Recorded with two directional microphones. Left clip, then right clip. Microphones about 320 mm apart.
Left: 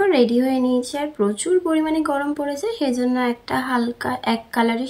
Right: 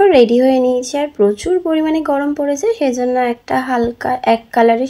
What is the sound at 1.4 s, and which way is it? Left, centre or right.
Speech, centre.